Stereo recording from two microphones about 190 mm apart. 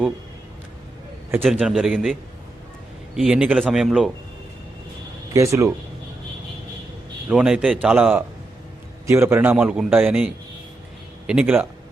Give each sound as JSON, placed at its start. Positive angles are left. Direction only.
{"t": 1.5, "sound": "a man's voice", "side_deg": 0}
{"t": 3.2, "sound": "a man's voice", "side_deg": -5}
{"t": 5.3, "sound": "a man's voice", "side_deg": -15}
{"t": 7.3, "sound": "a man's voice", "side_deg": -5}